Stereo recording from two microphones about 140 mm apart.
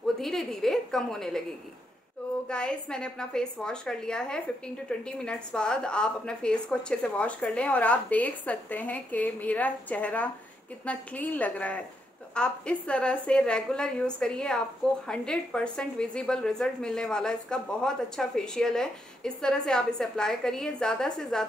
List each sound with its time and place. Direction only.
0.2 s a woman's voice: centre (ahead or behind)
2.4 s a woman's voice: 5° left (ahead or behind)